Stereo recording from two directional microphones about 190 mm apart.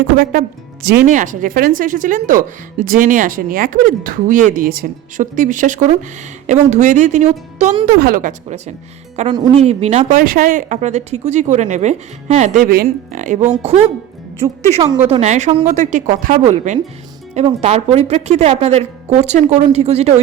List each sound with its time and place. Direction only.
1.0 s speech: 40° right (ahead or behind)
7.9 s speech: 50° right (ahead or behind); by 13.8 s 30° right (ahead or behind)
15.1 s speech: 35° right (ahead or behind)